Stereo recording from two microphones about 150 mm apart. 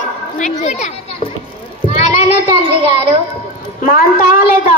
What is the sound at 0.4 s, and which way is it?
Speech, 50° left (ahead or behind).